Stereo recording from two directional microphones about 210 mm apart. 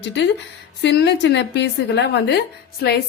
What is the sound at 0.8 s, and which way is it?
A woman's voice, 55° left (ahead or behind).